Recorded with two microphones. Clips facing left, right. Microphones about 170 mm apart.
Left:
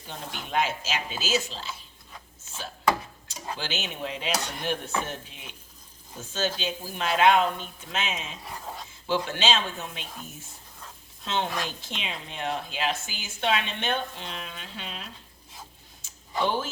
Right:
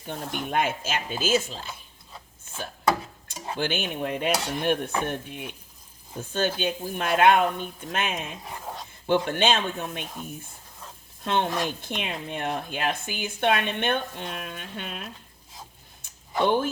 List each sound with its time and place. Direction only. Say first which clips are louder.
0.1 s speech: right 3 dB; 55° right (ahead or behind)
2.5 s chopping: right 4 dB; 55° right (ahead or behind)
3.6 s speech: right 7 dB; 55° right (ahead or behind)
16.4 s speech: right 4 dB; 60° right (ahead or behind)